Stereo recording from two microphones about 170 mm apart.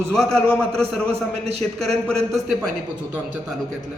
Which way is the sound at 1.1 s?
40° right (ahead or behind).